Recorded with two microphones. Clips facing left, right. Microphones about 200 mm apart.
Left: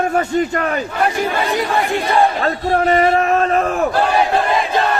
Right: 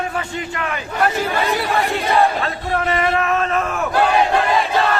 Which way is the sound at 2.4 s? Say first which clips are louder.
Left 5 dB; 35° left (ahead or behind).